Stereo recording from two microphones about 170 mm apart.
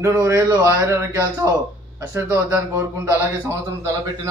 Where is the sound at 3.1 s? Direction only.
15° right (ahead or behind).